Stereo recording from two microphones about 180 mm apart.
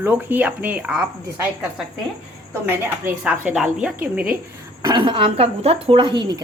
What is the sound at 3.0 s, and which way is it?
A woman's voice, 10° right (ahead or behind).